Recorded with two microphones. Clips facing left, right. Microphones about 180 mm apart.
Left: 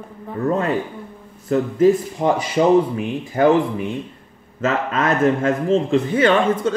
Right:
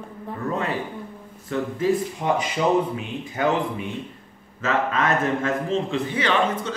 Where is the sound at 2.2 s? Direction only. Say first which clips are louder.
Left 10 dB; 45° left (ahead or behind).